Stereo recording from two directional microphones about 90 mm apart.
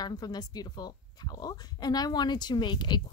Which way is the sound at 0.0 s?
50° left (ahead or behind).